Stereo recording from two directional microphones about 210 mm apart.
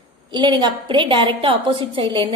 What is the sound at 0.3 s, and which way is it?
A woman's voice, 20° right (ahead or behind).